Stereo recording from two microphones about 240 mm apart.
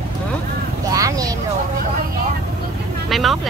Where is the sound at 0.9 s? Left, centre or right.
Centre.